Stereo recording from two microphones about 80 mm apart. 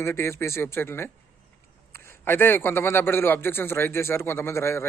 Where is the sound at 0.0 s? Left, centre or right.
Left.